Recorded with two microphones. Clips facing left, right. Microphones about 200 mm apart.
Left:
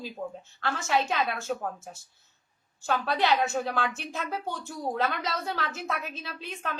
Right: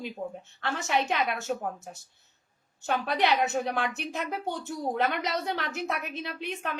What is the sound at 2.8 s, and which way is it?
Speech, 20° right (ahead or behind).